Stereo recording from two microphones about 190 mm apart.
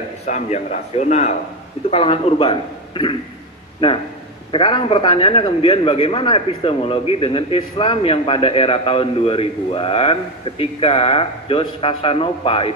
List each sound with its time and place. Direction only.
0.3 s a man's voice: 35° left (ahead or behind)